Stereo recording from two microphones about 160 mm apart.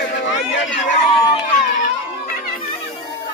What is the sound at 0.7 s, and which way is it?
Chatter, centre (ahead or behind).